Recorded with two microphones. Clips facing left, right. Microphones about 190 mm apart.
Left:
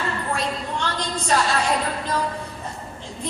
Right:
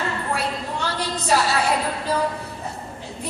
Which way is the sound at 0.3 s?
10° right (ahead or behind).